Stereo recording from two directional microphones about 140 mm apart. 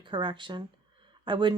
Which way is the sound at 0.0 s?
35° right (ahead or behind).